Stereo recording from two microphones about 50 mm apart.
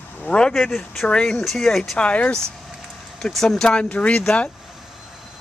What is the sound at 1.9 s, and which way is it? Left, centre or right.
Speech, left.